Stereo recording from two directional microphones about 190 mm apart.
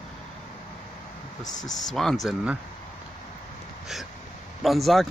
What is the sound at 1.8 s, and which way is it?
Speech, centre (ahead or behind).